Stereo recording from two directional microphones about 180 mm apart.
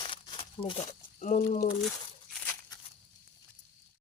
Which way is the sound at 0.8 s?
40° left (ahead or behind).